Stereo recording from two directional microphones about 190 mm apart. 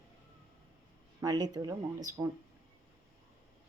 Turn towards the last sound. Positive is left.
turn(degrees=-20)  # may be behind; listen again after turning